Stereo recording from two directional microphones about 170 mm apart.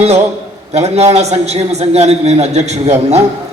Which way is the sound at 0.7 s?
40° right (ahead or behind).